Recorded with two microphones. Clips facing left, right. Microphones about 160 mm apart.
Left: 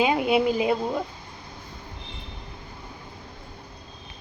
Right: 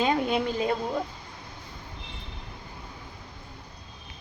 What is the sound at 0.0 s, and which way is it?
Speech, 10° left (ahead or behind).